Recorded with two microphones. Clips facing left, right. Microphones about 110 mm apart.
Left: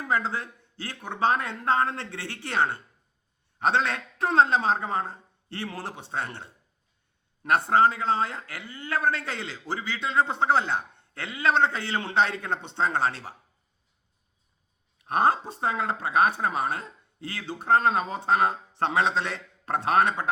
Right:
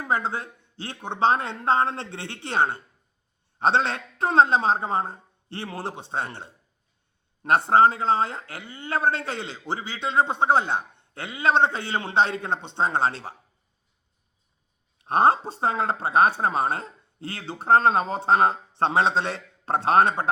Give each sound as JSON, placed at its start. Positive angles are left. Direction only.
{"t": 0.0, "sound": "speech", "side_deg": -20}
{"t": 14.9, "sound": "speech", "side_deg": -30}